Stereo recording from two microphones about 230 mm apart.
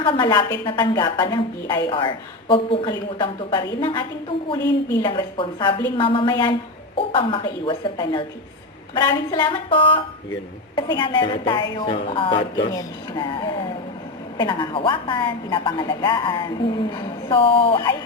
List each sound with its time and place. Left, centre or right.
0.0 s a woman's voice: centre